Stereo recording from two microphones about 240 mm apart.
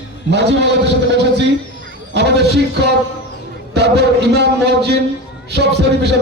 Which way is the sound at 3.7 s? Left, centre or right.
Right.